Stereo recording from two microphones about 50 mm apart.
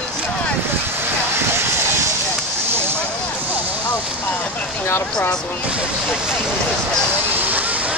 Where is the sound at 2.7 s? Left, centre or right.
Right.